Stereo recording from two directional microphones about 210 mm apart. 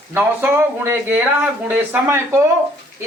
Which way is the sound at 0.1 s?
10° right (ahead or behind).